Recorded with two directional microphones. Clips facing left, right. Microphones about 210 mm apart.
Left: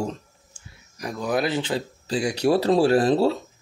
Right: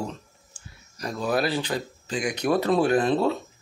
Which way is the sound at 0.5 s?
10° left (ahead or behind).